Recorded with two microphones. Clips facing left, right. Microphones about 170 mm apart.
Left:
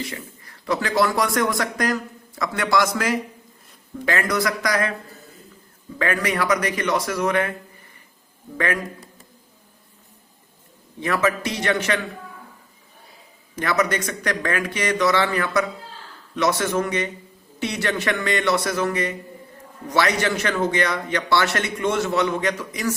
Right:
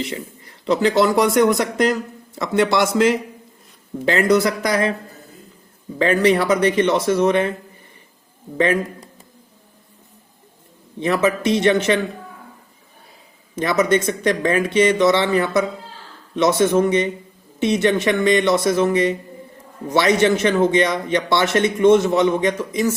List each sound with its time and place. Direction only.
0.0 s a man's voice: 20° right (ahead or behind)
6.0 s a man's voice: 25° right (ahead or behind)
8.5 s a man's voice: 25° right (ahead or behind)
11.0 s a man's voice: 20° right (ahead or behind)
13.6 s a man's voice: 20° right (ahead or behind)